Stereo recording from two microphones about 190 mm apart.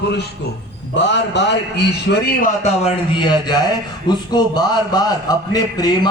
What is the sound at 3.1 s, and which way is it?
A man's voice, 25° left (ahead or behind).